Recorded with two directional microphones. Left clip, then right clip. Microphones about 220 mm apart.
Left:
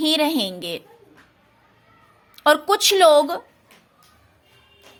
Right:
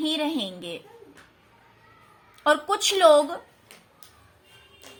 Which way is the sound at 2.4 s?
40° left (ahead or behind).